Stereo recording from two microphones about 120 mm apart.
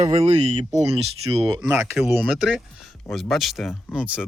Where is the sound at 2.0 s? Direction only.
Centre (ahead or behind).